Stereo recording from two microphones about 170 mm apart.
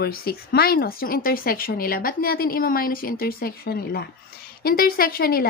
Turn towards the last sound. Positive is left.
turn(degrees=60)  # may be behind; listen again after turning